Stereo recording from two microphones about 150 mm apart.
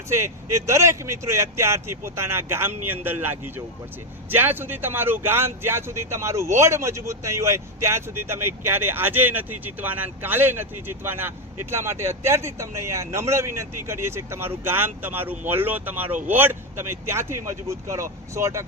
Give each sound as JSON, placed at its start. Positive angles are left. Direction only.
{"t": 0.1, "sound": "speech", "side_deg": -20}